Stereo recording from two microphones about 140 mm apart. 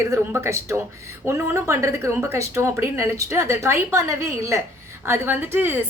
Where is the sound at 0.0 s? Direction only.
20° right (ahead or behind).